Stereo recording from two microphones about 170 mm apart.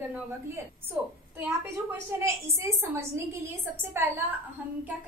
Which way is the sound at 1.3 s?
15° right (ahead or behind).